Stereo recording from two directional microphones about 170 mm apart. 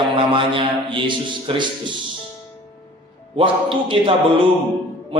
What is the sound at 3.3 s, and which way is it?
Speech, 30° right (ahead or behind).